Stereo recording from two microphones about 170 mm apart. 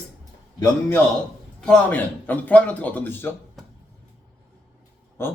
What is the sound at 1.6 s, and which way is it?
A man's voice, 5° left (ahead or behind).